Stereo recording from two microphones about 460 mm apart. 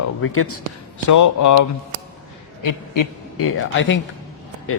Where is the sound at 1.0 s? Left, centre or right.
Left.